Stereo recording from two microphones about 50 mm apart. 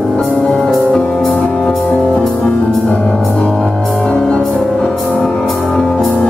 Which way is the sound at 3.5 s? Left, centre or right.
Centre.